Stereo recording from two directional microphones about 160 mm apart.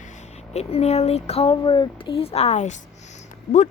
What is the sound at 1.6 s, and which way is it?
Speech, 30° left (ahead or behind).